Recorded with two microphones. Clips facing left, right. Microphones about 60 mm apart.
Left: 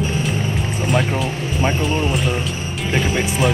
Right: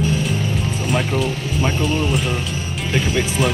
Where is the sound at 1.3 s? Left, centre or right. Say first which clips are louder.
Left 1 dB; left.